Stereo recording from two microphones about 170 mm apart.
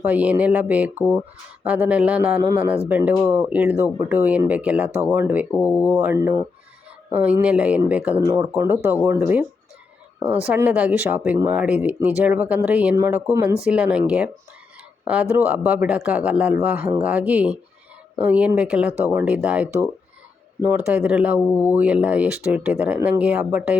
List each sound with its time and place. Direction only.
0.0 s speech: 10° right (ahead or behind)
21.4 s speech: 15° left (ahead or behind)
21.7 s speech: 10° right (ahead or behind)